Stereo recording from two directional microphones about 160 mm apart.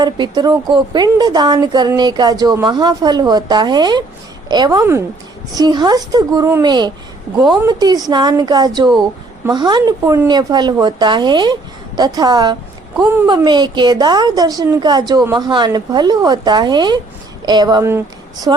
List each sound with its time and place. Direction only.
0.0 s a woman's voice: 25° right (ahead or behind)